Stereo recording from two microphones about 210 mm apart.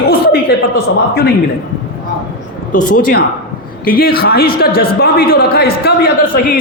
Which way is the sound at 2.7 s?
40° left (ahead or behind).